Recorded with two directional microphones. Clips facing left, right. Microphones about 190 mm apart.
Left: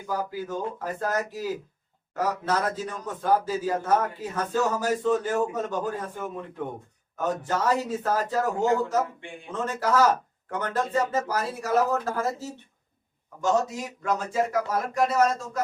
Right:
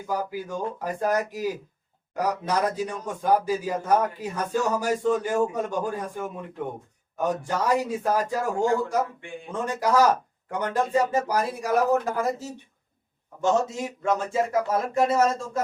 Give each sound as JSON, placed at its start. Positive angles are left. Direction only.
{"t": 0.1, "sound": "a man's voice", "side_deg": -15}
{"t": 13.4, "sound": "speech", "side_deg": -25}